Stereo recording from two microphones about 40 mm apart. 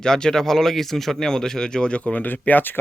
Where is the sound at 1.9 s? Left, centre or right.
Left.